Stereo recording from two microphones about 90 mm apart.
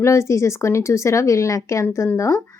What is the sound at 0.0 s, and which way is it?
A woman's voice, 30° left (ahead or behind).